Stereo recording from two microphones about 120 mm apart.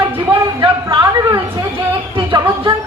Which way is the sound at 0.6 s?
40° right (ahead or behind).